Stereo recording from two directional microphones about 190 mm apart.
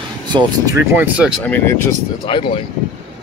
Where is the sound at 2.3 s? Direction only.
25° left (ahead or behind).